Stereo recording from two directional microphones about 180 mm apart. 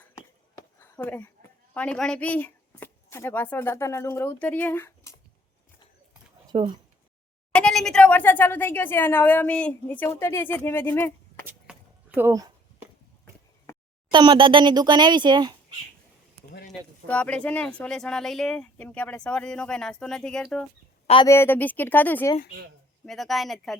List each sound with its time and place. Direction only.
0.8 s a sound: 10° left (ahead or behind)
1.7 s speech: 5° left (ahead or behind)
6.5 s speech: 25° right (ahead or behind)
7.5 s a woman's voice: 5° left (ahead or behind)
11.4 s keys jangling: 10° right (ahead or behind)
14.1 s speech: 25° right (ahead or behind)
16.7 s a woman's voice: centre (ahead or behind)